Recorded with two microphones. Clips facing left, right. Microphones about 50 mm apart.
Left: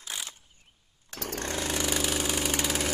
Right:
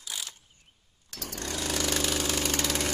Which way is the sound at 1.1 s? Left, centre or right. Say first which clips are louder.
Left 3 dB; left.